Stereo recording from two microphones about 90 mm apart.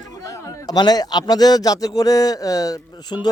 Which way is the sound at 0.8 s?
45° left (ahead or behind).